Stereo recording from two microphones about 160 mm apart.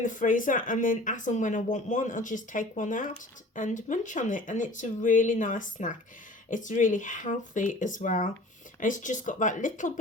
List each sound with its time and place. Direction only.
0.0 s speech: 55° left (ahead or behind)